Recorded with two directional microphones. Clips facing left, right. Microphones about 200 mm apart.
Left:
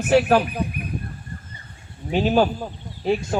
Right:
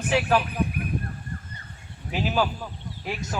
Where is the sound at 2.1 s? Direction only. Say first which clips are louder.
Left 7 dB; 35° left (ahead or behind).